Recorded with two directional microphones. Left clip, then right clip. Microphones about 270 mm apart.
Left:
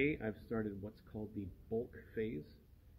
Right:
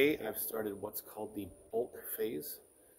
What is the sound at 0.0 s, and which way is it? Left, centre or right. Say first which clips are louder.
Speech: right 6 dB; centre.